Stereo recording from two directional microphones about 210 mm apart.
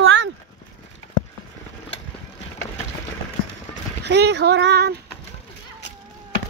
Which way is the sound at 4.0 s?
55° right (ahead or behind).